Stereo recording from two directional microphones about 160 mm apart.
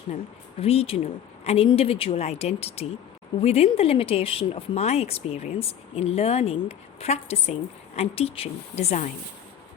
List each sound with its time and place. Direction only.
0.6 s speech: 40° left (ahead or behind)